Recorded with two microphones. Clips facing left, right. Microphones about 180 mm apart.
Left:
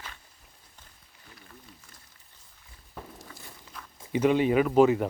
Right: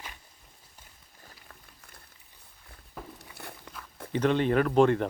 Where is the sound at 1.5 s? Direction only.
60° right (ahead or behind).